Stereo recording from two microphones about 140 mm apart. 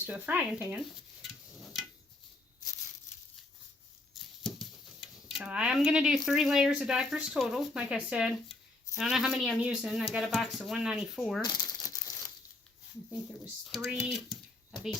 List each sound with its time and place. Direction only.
0.0 s speech: 10° right (ahead or behind)
0.8 s dishes: centre (ahead or behind)
4.4 s a sound: centre (ahead or behind)
5.4 s speech: 10° right (ahead or behind)
11.4 s crumpling: 25° left (ahead or behind)
13.9 s speech: centre (ahead or behind)